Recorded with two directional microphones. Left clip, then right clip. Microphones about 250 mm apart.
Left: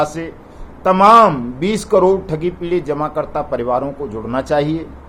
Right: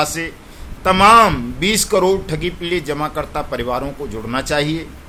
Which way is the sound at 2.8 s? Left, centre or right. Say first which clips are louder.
Left 2 dB; right.